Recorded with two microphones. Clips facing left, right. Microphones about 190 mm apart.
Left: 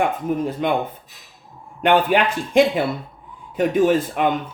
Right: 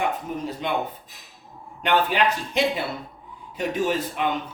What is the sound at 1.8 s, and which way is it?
Speech, 50° left (ahead or behind).